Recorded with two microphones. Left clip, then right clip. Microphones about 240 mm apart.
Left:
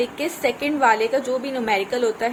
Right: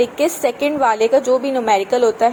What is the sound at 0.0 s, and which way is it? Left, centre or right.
A woman's voice, right.